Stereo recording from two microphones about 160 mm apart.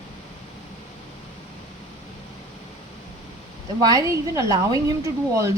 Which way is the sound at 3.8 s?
20° right (ahead or behind).